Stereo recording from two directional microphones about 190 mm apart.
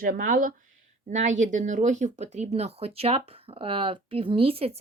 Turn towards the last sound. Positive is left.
turn(degrees=-30)  # may be behind; listen again after turning